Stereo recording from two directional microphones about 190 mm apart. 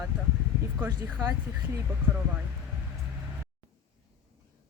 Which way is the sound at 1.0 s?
10° right (ahead or behind).